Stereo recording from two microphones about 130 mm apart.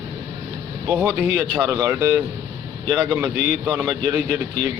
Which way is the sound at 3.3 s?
65° left (ahead or behind).